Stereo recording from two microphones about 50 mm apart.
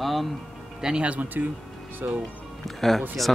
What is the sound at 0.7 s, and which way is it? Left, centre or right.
Speech, centre.